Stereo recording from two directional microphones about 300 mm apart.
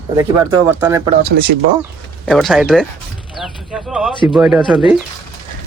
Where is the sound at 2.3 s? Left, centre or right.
Centre.